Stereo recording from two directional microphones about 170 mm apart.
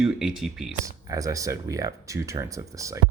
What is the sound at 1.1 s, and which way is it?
Speech, 20° right (ahead or behind).